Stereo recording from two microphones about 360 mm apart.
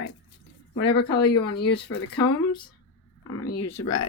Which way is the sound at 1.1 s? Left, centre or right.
Centre.